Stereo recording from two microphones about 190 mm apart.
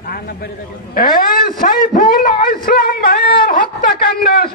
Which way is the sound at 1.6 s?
45° left (ahead or behind).